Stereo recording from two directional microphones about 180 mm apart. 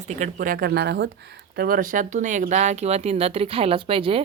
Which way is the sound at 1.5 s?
55° right (ahead or behind).